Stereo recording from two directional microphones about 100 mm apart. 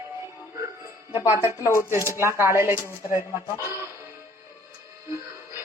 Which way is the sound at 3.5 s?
30° left (ahead or behind).